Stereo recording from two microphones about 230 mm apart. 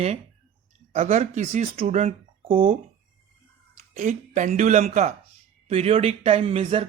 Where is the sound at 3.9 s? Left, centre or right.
Right.